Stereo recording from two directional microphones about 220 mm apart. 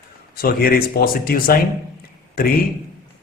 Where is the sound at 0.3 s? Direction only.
45° left (ahead or behind).